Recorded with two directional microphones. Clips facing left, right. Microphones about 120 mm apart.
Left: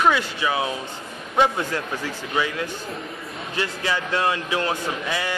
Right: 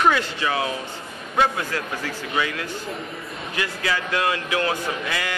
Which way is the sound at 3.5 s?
25° left (ahead or behind).